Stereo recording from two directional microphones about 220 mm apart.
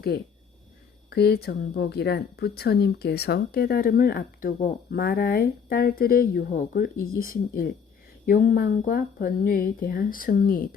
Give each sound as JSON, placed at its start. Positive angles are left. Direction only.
{"t": 1.1, "sound": "speech", "side_deg": 45}